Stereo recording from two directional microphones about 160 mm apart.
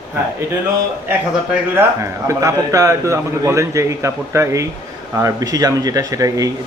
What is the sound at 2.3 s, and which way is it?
A man's voice, 20° right (ahead or behind).